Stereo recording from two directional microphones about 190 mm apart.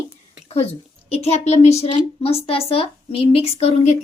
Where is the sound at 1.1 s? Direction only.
35° left (ahead or behind).